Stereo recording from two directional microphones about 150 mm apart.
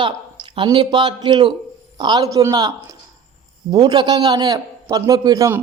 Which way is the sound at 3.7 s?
30° right (ahead or behind).